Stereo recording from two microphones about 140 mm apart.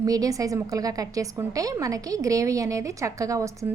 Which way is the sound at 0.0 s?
25° right (ahead or behind).